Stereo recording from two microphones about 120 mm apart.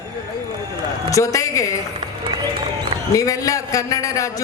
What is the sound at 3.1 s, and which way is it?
A woman's voice, 30° left (ahead or behind).